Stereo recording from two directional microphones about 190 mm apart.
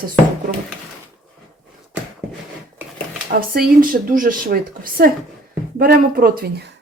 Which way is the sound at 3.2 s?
50° right (ahead or behind).